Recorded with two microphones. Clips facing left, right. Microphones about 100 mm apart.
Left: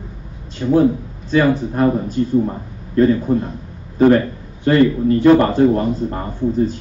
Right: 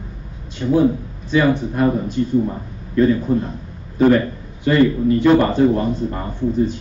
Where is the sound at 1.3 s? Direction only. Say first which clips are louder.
Left 1 dB; 40° left (ahead or behind).